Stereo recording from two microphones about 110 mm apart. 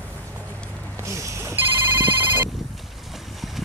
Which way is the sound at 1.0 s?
25° right (ahead or behind).